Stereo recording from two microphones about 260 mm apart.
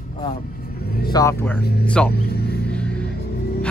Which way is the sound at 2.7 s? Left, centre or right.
Centre.